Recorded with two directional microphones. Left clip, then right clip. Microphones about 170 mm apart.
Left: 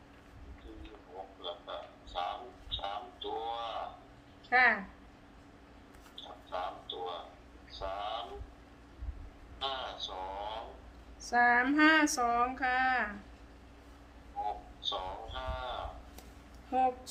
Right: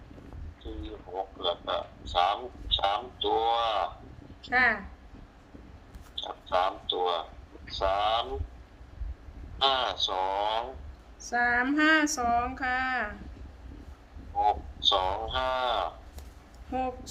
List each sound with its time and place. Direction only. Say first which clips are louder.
1.4 s a sound: right 12 dB; 80° right
4.4 s female singing: right 2 dB; 10° right (ahead or behind)
6.1 s a sound: right 12 dB; 80° right
7.7 s speech: right 12 dB; 80° right
9.6 s speech: right 12 dB; 75° right (ahead or behind)
11.2 s female singing: right 1 dB; 10° right (ahead or behind)
14.4 s speech: right 12 dB; 80° right
16.7 s female singing: left 2 dB; 10° right (ahead or behind)